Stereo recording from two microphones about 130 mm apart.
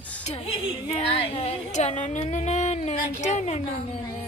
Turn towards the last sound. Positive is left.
turn(degrees=65)  # may be behind; listen again after turning